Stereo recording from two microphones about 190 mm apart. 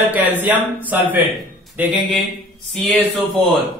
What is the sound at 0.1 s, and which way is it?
A man's voice, 10° right (ahead or behind).